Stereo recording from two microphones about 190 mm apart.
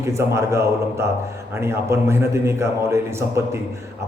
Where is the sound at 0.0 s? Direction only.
15° right (ahead or behind).